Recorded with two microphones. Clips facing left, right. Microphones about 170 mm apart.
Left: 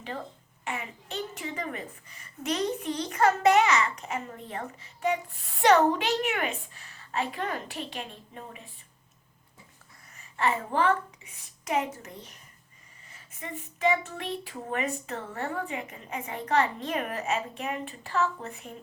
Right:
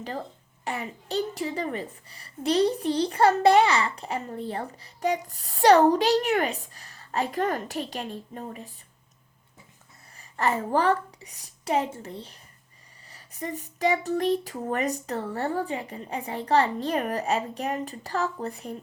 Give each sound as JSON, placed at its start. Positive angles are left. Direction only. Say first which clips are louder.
{"t": 0.6, "sound": "a woman's voice", "louder": "right 4 dB", "side_deg": -35}
{"t": 10.2, "sound": "a woman's voice", "louder": "right 2 dB", "side_deg": -40}